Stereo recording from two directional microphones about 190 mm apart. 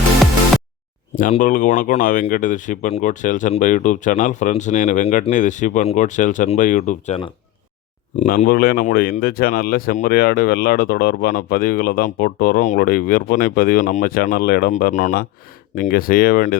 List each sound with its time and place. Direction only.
1.4 s speech: 45° left (ahead or behind)
8.2 s speech: 45° left (ahead or behind)